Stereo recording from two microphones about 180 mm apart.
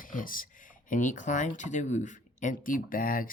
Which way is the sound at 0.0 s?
50° left (ahead or behind).